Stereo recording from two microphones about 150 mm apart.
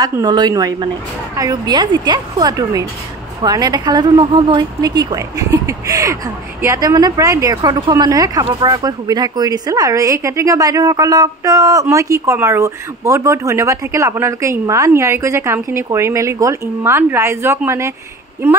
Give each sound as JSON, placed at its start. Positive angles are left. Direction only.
{"t": 0.0, "sound": "a woman's voice", "side_deg": -25}